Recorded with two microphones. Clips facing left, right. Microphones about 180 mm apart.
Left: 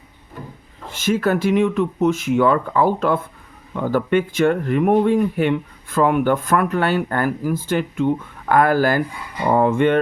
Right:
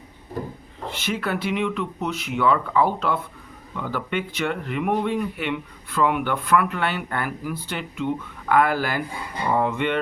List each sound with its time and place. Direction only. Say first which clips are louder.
0.4 s wood: right 5 dB; 40° right (ahead or behind)
0.9 s speech: left 8 dB; 45° left (ahead or behind)